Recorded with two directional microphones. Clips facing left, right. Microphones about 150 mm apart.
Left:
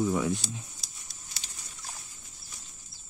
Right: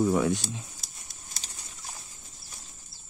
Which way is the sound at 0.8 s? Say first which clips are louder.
Right 2 dB; 50° right (ahead or behind).